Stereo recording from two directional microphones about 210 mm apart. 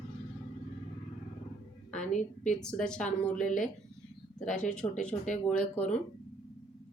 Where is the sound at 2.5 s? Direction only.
5° left (ahead or behind).